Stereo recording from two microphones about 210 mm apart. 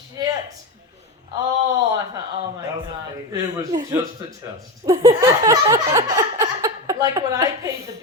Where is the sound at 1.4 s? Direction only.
15° right (ahead or behind).